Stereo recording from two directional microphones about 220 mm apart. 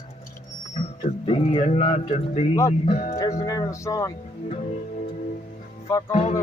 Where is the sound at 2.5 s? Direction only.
15° left (ahead or behind).